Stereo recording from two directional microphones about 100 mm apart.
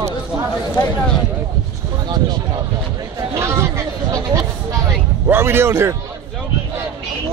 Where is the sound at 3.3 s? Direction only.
30° right (ahead or behind).